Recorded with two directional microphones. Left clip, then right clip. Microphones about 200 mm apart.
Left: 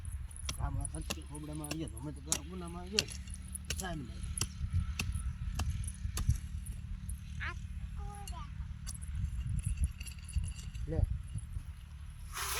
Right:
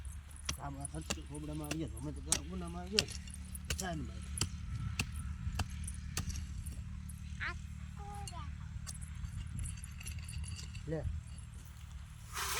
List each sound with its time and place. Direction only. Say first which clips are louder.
0.4 s speech: right 1 dB; 5° left (ahead or behind)
3.7 s vehicle: even; 5° right (ahead or behind)
4.1 s speech: even; 45° left (ahead or behind)
4.4 s chop: left 1 dB; 45° left (ahead or behind)
5.6 s keys jangling: left 2 dB; 50° left (ahead or behind)
6.1 s a sound: right 1 dB; centre (ahead or behind)
7.4 s vehicle: right 1 dB; 5° right (ahead or behind)
8.2 s a sound: left 2 dB; 5° left (ahead or behind)
10.9 s speech: right 1 dB; 25° right (ahead or behind)
12.3 s zipper: even; 5° left (ahead or behind)